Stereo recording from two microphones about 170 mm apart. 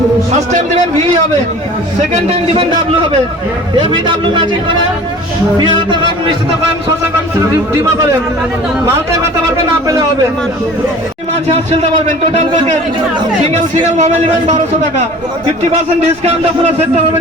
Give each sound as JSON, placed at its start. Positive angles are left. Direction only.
{"t": 2.1, "sound": "a man's voice", "side_deg": -35}
{"t": 9.8, "sound": "a man's voice", "side_deg": -20}
{"t": 11.4, "sound": "speech", "side_deg": -40}
{"t": 13.7, "sound": "a man's voice", "side_deg": -45}